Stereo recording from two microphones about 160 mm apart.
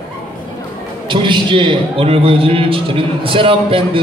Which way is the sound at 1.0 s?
30° right (ahead or behind).